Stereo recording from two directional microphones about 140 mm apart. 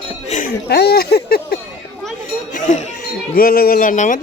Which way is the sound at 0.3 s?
75° left (ahead or behind).